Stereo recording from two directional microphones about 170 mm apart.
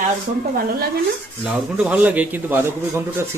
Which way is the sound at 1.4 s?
5° right (ahead or behind).